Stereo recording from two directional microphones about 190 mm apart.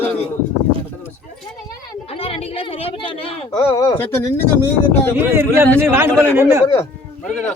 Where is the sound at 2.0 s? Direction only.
30° left (ahead or behind).